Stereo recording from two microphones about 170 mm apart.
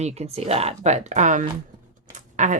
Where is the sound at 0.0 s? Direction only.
40° right (ahead or behind).